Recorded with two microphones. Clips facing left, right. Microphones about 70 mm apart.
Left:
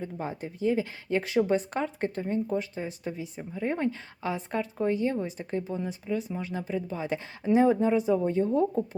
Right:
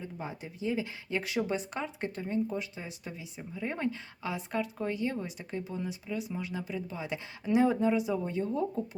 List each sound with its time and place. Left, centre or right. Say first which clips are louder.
0.0 s speech: left 6 dB; left